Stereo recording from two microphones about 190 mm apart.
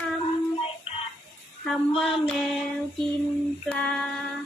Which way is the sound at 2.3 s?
Centre (ahead or behind).